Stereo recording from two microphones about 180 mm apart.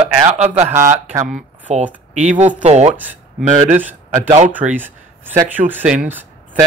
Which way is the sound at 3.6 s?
10° right (ahead or behind).